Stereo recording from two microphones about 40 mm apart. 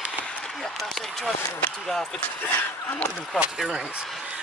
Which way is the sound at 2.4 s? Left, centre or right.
Left.